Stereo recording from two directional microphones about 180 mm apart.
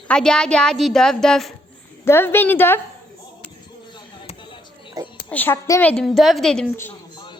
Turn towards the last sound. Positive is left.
turn(degrees=10)  # may be behind; listen again after turning